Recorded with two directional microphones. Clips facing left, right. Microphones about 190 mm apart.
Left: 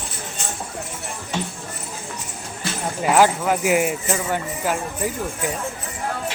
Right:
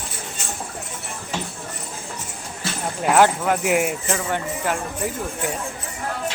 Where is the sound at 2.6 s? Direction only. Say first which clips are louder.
Left 1 dB; 5° left (ahead or behind).